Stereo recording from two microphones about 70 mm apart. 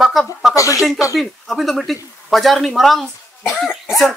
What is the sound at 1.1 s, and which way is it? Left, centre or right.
Speech, centre.